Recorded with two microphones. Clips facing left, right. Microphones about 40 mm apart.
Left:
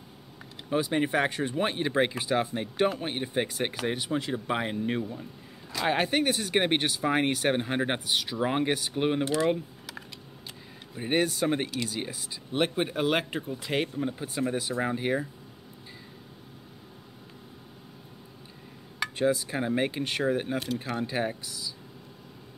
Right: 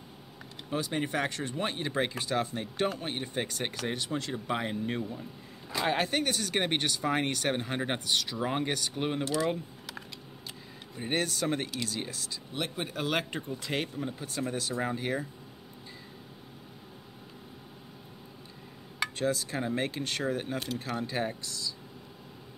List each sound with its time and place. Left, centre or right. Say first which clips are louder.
0.7 s speech: left 5 dB; centre
11.0 s speech: left 5 dB; centre
12.5 s speech: left 8 dB; left
13.0 s speech: left 2 dB; centre
19.1 s speech: left 6 dB; centre
20.5 s speech: left 3 dB; centre